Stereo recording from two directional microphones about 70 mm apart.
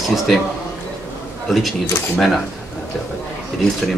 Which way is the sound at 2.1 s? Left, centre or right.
Centre.